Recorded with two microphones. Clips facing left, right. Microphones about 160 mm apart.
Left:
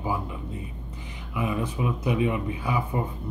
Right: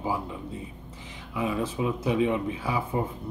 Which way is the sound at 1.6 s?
25° right (ahead or behind).